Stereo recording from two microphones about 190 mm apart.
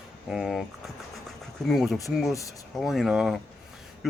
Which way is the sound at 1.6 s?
Centre (ahead or behind).